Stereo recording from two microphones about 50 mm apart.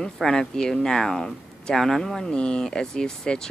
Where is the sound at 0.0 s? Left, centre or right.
Centre.